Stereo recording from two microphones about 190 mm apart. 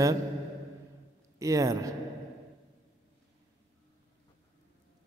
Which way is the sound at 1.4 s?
20° right (ahead or behind).